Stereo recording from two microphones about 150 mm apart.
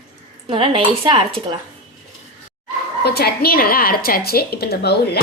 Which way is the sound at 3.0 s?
90° left.